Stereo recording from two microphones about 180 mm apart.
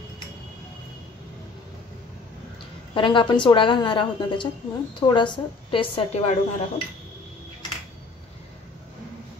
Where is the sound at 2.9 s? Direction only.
25° left (ahead or behind).